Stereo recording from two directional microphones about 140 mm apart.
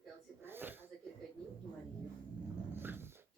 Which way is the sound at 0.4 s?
15° right (ahead or behind).